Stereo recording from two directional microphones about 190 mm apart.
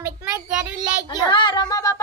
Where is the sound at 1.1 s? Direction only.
25° left (ahead or behind).